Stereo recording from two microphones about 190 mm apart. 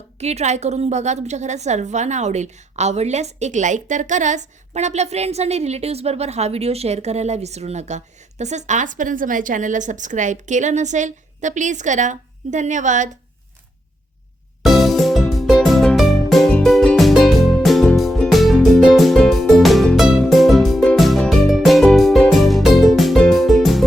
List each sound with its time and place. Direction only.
0.2 s a woman's voice: 35° right (ahead or behind)
14.6 s music: centre (ahead or behind)